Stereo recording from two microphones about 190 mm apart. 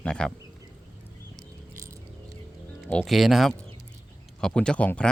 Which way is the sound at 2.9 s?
5° left (ahead or behind).